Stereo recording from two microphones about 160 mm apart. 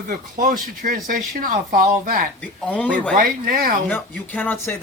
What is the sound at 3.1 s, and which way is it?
Speech, 65° right (ahead or behind).